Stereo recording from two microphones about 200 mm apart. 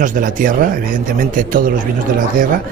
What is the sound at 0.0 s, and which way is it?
Speech, 40° right (ahead or behind).